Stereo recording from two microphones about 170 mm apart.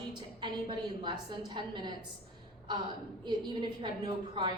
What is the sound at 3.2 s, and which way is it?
A woman's voice, 25° right (ahead or behind).